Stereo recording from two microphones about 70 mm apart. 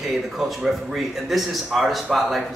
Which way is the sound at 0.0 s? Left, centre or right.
Centre.